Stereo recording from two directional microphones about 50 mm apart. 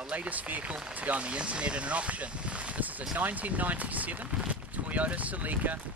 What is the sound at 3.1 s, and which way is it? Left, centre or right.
Speech, right.